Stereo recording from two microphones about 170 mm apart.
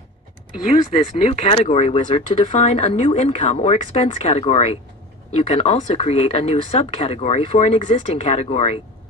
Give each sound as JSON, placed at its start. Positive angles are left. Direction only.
{"t": 1.3, "sound": "speech", "side_deg": 40}